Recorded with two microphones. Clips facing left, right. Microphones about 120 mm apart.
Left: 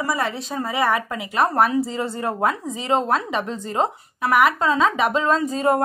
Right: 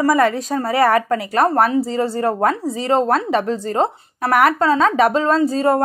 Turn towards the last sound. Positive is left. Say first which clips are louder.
# right 4 dB
turn(degrees=-35)  # may be behind; listen again after turning